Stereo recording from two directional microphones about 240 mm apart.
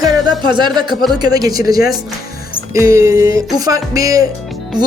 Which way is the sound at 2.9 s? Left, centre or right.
Centre.